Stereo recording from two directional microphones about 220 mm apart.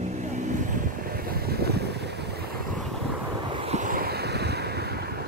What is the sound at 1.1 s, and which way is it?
Vehicle, 45° right (ahead or behind).